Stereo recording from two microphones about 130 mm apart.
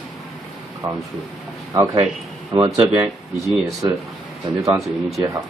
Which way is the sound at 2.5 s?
40° right (ahead or behind).